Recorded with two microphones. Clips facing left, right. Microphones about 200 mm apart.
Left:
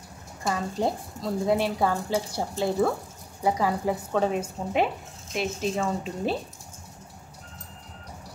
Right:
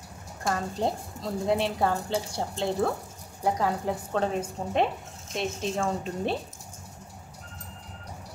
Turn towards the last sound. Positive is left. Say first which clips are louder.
# left 1 dB
turn(degrees=5)  # may be behind; listen again after turning